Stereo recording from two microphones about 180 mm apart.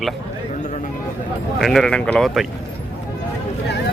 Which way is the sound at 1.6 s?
Centre (ahead or behind).